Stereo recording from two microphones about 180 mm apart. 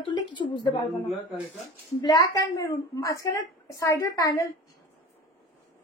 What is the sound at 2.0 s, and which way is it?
A child's voice, 20° left (ahead or behind).